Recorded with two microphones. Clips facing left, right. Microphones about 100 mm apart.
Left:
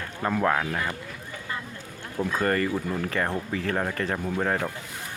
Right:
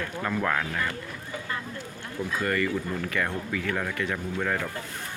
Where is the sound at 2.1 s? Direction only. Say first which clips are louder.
Left 3 dB; 40° left (ahead or behind).